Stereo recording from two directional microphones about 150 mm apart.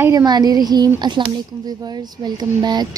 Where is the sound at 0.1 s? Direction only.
25° right (ahead or behind).